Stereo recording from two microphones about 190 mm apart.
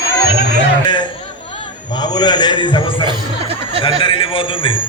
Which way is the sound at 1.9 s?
20° left (ahead or behind).